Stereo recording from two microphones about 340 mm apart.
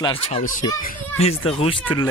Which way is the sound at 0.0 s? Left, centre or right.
Centre.